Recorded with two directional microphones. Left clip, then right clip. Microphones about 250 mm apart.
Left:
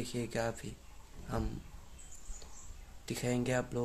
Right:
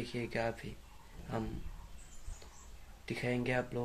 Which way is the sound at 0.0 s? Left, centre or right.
Centre.